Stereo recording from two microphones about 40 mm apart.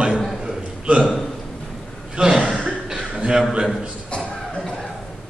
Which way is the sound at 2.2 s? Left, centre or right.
Right.